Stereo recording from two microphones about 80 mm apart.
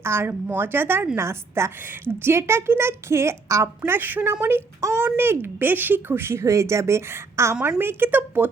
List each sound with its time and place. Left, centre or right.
0.0 s a woman's voice: right
4.8 s a woman's voice: right
5.1 s a woman's voice: right
7.8 s speech: right